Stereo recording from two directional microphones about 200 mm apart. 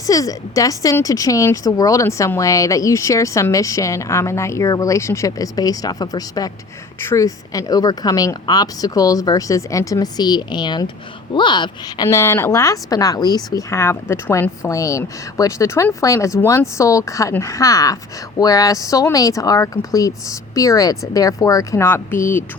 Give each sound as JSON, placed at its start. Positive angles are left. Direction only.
{"t": 0.1, "sound": "a woman's voice", "side_deg": 15}